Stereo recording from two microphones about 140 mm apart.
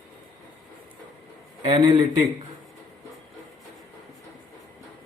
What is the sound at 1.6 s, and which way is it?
Speech, 35° right (ahead or behind).